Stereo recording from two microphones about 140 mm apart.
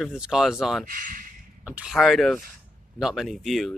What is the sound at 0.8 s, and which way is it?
Speech, 75° right (ahead or behind).